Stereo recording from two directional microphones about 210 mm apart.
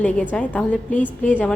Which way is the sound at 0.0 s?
5° left (ahead or behind).